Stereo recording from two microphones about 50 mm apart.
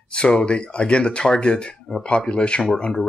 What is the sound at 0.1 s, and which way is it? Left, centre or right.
Speech, left.